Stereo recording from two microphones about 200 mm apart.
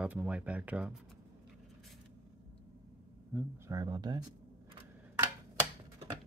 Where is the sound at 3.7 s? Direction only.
20° right (ahead or behind).